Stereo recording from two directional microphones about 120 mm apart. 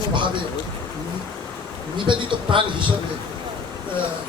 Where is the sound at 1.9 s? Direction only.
45° right (ahead or behind).